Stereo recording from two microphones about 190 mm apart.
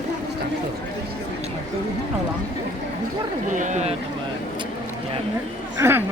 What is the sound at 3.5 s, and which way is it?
Run, 40° right (ahead or behind).